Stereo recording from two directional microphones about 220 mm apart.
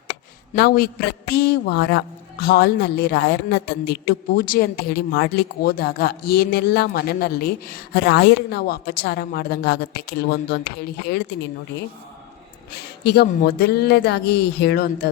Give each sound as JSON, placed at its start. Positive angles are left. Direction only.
{"t": 0.5, "sound": "a woman's voice", "side_deg": 45}
{"t": 12.7, "sound": "a woman's voice", "side_deg": 45}